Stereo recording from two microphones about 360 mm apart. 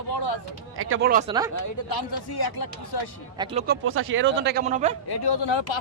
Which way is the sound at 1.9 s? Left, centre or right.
Left.